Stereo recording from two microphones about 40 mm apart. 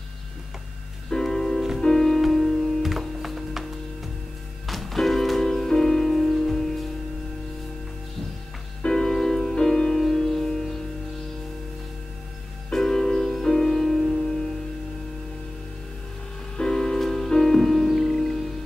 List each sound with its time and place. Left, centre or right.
1.1 s music: centre
2.8 s music: centre
4.6 s music: centre
8.8 s music: centre
12.7 s music: centre
16.5 s music: centre